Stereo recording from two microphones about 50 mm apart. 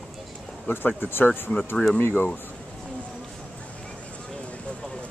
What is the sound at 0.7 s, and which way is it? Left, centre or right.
Speech, left.